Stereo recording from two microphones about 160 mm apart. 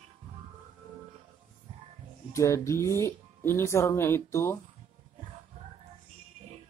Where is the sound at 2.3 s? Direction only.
20° left (ahead or behind).